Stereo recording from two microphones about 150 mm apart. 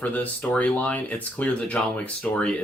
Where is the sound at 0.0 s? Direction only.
10° left (ahead or behind).